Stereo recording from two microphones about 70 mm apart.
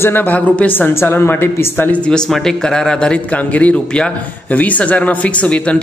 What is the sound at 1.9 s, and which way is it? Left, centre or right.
A man's voice, centre.